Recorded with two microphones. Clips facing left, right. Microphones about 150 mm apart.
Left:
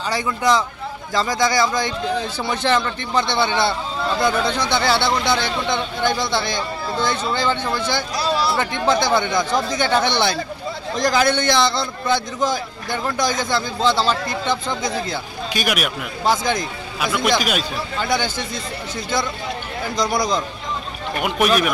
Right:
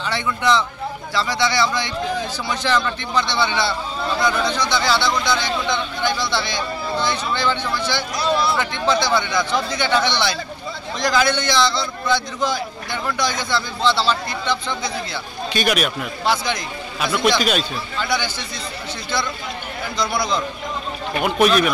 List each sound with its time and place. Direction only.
0.0 s a man's voice: 40° left (ahead or behind)
2.5 s speech: 55° left (ahead or behind)
8.3 s a man's voice: 35° left (ahead or behind)
8.5 s speech: 50° left (ahead or behind)
15.5 s speech: 5° left (ahead or behind)
16.3 s speech: 45° left (ahead or behind)
17.0 s speech: 5° left (ahead or behind)
18.0 s speech: 50° left (ahead or behind)
20.0 s a man's voice: 40° left (ahead or behind)
21.2 s speech: 10° left (ahead or behind)